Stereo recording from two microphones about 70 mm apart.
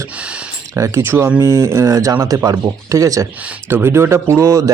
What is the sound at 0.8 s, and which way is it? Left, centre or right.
Speech, right.